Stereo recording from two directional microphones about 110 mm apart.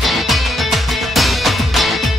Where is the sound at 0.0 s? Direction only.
Centre (ahead or behind).